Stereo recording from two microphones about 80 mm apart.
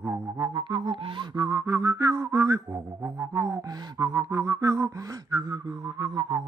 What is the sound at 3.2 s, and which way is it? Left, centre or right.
Music, right.